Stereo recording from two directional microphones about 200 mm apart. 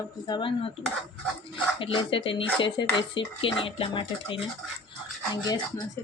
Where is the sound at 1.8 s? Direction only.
25° left (ahead or behind).